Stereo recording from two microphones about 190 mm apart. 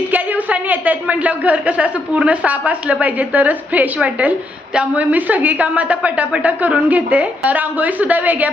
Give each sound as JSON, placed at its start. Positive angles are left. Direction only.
{"t": 0.1, "sound": "a woman's voice", "side_deg": -10}